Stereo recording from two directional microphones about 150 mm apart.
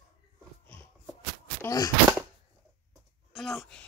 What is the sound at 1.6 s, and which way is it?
Speech, 25° left (ahead or behind).